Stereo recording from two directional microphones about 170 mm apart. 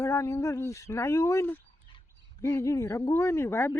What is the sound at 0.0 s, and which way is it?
Speech, 15° left (ahead or behind).